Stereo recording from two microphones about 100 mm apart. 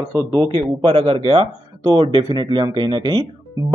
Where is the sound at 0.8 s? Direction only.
65° right (ahead or behind).